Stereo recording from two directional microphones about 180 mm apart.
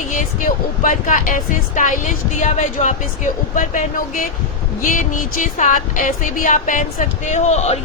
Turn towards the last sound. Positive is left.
turn(degrees=35)  # may be behind; listen again after turning